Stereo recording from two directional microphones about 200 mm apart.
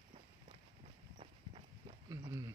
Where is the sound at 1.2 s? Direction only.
30° right (ahead or behind).